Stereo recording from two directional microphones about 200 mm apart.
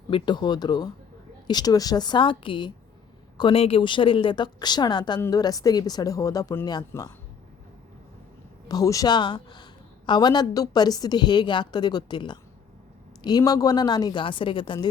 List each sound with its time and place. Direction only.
0.1 s a woman's voice: 20° left (ahead or behind)
8.6 s a woman's voice: 15° left (ahead or behind)